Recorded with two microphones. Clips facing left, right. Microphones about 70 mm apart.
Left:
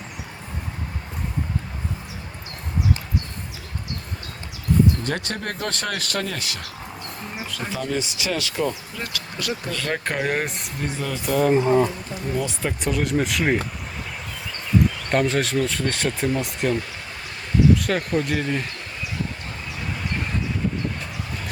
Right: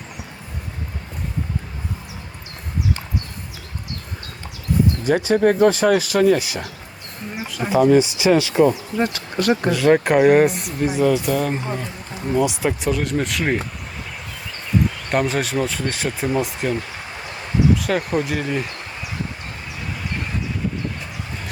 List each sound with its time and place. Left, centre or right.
4.7 s a sound: centre
5.0 s speech: centre; by 9.5 s right
9.6 s speech: centre
12.3 s speech: centre
15.1 s speech: centre
19.8 s a sound: centre